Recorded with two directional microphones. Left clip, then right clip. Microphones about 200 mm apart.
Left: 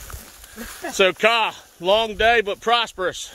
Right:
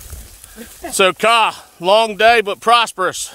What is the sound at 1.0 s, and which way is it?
Speech, 40° right (ahead or behind).